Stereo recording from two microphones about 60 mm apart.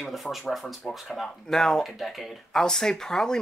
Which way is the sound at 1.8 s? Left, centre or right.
Centre.